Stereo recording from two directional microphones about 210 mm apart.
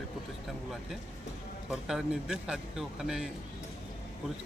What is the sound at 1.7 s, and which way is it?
Speech, centre (ahead or behind).